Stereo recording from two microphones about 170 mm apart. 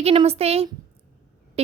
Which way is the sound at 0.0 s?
35° right (ahead or behind).